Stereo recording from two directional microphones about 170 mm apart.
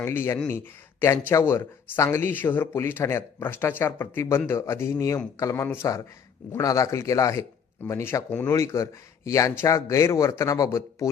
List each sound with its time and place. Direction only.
0.0 s speech: 15° left (ahead or behind)